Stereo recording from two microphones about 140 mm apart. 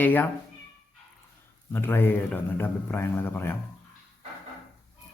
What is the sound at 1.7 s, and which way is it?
A man's voice, 15° left (ahead or behind).